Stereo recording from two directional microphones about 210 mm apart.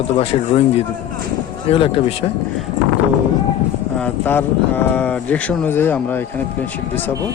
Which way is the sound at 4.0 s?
10° left (ahead or behind).